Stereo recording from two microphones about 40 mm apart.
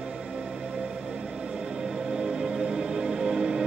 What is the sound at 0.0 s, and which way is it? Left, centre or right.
Music, right.